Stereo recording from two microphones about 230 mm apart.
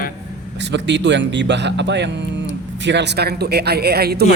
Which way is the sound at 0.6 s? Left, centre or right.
Right.